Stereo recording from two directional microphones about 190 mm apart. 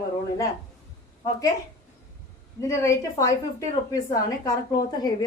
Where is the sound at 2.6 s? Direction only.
15° left (ahead or behind).